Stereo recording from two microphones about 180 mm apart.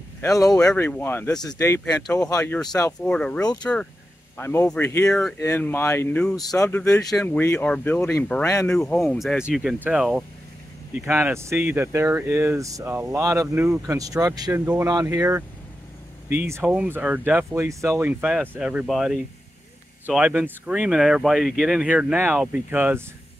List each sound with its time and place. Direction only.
0.2 s speech: 20° left (ahead or behind); by 23.0 s 10° right (ahead or behind)